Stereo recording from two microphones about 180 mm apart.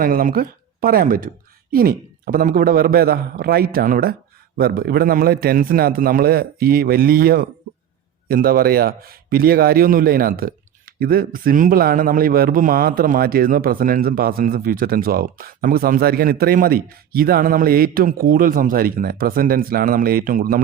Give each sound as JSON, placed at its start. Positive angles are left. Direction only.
{"t": 0.0, "sound": "a man's voice", "side_deg": -50}